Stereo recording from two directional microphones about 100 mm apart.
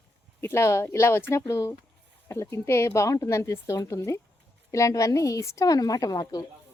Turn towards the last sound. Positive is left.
turn(degrees=40)  # may be behind; listen again after turning